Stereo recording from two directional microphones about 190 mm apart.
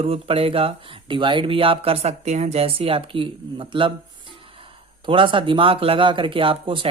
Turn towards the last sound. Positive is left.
turn(degrees=-25)  # may be behind; listen again after turning